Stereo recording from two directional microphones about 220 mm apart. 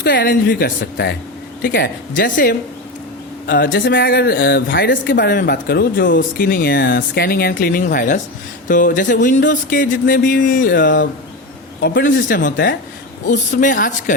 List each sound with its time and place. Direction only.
0.0 s speech: 45° left (ahead or behind)
10.7 s speech: 55° left (ahead or behind)
11.8 s speech: 40° left (ahead or behind)
13.6 s speech: 35° left (ahead or behind)